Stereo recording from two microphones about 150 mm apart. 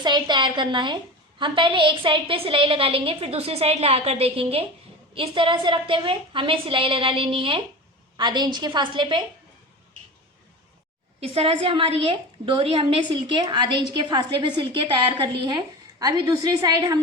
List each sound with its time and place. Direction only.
0.0 s a woman's voice: 30° right (ahead or behind)
11.2 s a woman's voice: 40° right (ahead or behind); by 17.0 s 25° right (ahead or behind)